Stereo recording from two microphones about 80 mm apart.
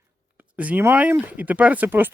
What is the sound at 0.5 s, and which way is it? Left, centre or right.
Speech, centre.